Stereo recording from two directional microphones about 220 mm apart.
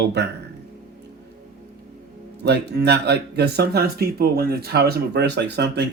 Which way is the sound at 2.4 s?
50° right (ahead or behind).